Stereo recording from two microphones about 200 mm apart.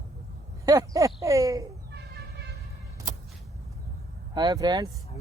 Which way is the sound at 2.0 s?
55° right (ahead or behind).